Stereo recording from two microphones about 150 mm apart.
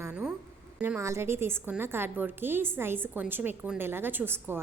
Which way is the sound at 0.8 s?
15° right (ahead or behind).